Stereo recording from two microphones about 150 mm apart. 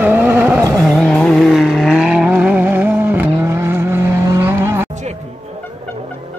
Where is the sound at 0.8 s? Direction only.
5° left (ahead or behind); by 4.8 s 15° right (ahead or behind).